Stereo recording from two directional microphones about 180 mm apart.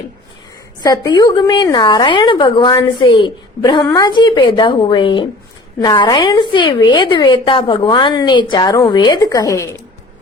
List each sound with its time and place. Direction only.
0.8 s a woman's voice: 20° left (ahead or behind)